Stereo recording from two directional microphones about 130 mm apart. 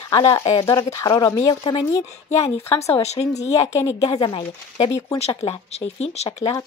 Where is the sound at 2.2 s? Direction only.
55° left (ahead or behind).